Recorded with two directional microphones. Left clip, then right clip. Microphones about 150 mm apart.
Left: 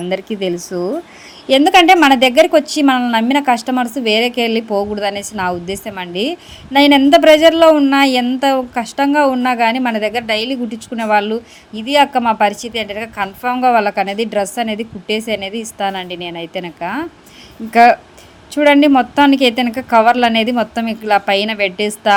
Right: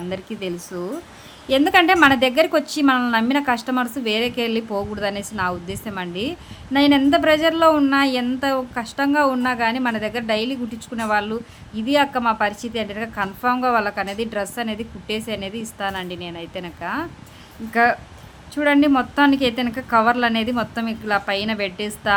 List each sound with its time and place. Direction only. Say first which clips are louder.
0.1 s a woman's voice: left 10 dB; 20° left (ahead or behind)
17.7 s a woman's voice: left 9 dB; 30° left (ahead or behind)